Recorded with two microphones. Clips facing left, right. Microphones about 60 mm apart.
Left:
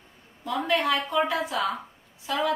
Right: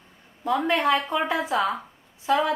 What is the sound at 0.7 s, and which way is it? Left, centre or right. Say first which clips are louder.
A woman's voice: right 1 dB; right.